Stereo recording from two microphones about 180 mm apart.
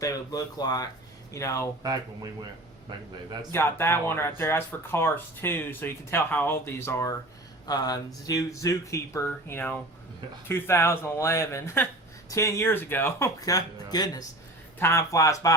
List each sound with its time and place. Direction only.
0.0 s speech: 20° left (ahead or behind)
1.8 s speech: 20° right (ahead or behind)
3.5 s speech: 15° left (ahead or behind)